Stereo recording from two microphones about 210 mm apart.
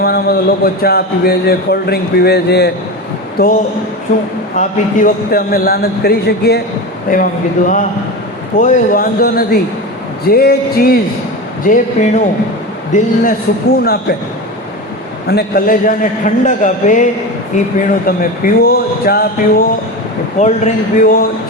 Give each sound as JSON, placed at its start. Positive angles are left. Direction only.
{"t": 0.0, "sound": "a man's voice", "side_deg": 50}
{"t": 7.1, "sound": "a man's voice", "side_deg": 40}
{"t": 13.8, "sound": "a man's voice", "side_deg": 50}
{"t": 15.3, "sound": "a man's voice", "side_deg": 45}